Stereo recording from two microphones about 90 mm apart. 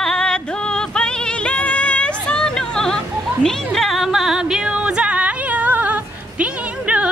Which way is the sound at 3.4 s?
5° left (ahead or behind).